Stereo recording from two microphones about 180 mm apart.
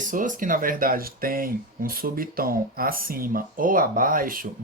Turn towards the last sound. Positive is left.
turn(degrees=-50)  # may be behind; listen again after turning